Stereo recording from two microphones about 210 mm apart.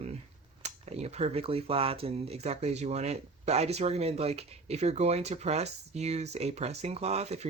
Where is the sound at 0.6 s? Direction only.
30° right (ahead or behind).